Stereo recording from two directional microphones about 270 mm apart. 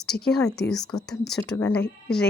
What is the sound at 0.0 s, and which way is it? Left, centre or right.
A woman's voice, centre.